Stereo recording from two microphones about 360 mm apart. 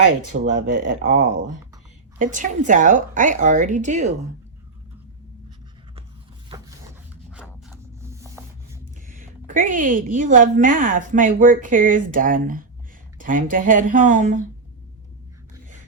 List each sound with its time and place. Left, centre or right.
0.4 s a woman's voice: right
7.3 s a sound: centre
9.1 s a woman's voice: right